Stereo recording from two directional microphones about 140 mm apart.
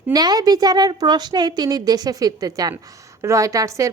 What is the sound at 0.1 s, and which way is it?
A woman's voice, 30° right (ahead or behind).